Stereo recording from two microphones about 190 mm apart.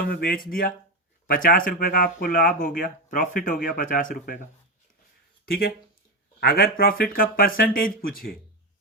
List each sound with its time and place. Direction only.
0.0 s speech: 50° left (ahead or behind)
5.5 s speech: 55° left (ahead or behind)